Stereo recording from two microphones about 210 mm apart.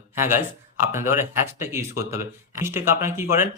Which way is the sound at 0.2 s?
10° right (ahead or behind).